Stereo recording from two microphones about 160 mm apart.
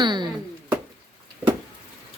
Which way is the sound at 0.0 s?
30° right (ahead or behind).